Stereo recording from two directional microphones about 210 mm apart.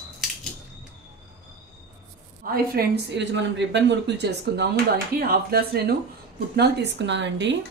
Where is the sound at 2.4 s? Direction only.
45° right (ahead or behind).